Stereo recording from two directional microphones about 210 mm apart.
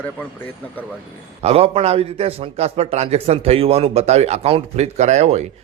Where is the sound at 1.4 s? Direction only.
30° right (ahead or behind).